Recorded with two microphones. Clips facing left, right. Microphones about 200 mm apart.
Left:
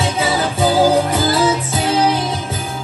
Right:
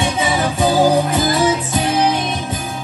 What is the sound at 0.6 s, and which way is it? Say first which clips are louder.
Music: left 1 dB; 30° left (ahead or behind).